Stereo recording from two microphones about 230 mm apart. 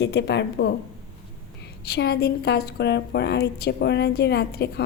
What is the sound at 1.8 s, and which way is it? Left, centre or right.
A woman's voice, left.